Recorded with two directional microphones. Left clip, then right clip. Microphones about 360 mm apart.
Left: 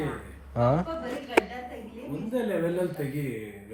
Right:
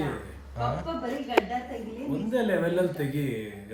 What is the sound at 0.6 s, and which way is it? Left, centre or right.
Speech, centre.